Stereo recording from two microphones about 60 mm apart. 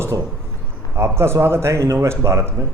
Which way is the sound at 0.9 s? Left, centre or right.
Right.